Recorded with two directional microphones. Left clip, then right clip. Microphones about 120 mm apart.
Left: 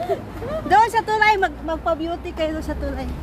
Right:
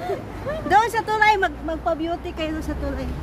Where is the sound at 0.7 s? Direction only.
5° left (ahead or behind).